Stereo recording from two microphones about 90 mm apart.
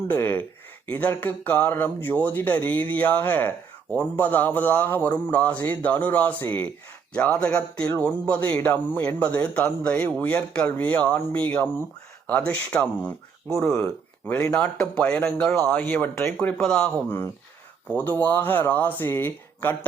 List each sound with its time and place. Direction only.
0.1 s a man's voice: 20° left (ahead or behind)
14.4 s a man's voice: 10° left (ahead or behind)
17.1 s speech: 25° left (ahead or behind)